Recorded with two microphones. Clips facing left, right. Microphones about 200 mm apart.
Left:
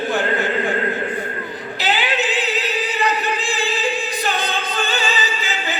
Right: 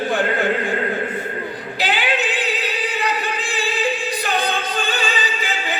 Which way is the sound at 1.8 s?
60° right (ahead or behind).